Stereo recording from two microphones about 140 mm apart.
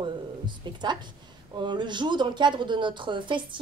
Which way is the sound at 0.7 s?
30° right (ahead or behind).